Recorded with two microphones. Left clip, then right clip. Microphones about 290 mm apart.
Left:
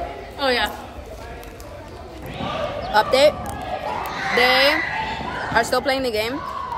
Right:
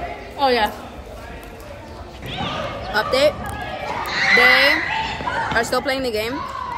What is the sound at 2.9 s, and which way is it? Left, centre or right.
Speech, centre.